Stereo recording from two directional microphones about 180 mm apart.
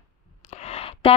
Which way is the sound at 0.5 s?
35° left (ahead or behind).